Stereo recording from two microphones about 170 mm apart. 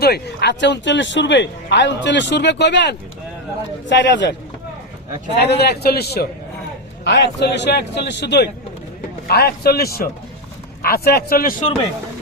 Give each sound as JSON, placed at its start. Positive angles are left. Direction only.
{"t": 0.0, "sound": "a man's voice", "side_deg": 70}
{"t": 5.4, "sound": "a man's voice", "side_deg": 80}
{"t": 7.0, "sound": "a man's voice", "side_deg": 90}
{"t": 9.2, "sound": "speech", "side_deg": 65}